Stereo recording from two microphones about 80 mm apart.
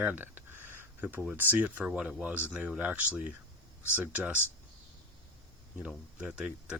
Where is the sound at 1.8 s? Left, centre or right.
Centre.